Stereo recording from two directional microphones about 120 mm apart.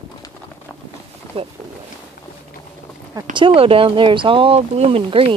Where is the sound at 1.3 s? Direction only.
55° right (ahead or behind).